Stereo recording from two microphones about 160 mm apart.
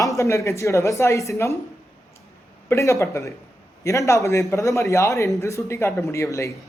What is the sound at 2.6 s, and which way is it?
A man's voice, 20° left (ahead or behind).